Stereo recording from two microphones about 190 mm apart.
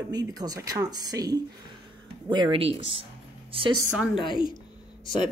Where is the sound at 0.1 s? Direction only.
20° right (ahead or behind).